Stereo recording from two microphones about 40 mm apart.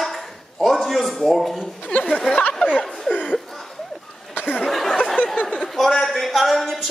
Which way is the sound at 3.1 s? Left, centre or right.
Left.